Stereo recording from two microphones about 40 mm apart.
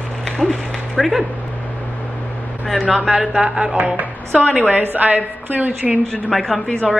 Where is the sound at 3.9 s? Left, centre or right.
Right.